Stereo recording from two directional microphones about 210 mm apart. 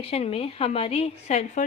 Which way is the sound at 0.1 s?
30° left (ahead or behind).